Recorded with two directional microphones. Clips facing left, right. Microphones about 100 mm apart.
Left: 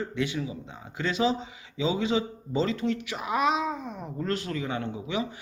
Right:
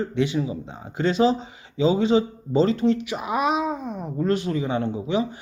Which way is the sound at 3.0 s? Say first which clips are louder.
Right 3 dB; 20° right (ahead or behind).